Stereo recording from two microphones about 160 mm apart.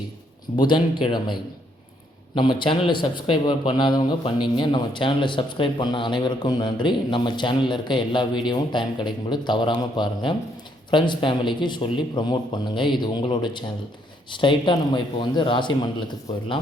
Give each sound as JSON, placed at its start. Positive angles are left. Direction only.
{"t": 0.5, "sound": "a man's voice", "side_deg": 30}